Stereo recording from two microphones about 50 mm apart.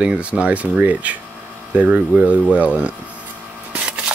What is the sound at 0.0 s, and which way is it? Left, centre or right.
Speech, right.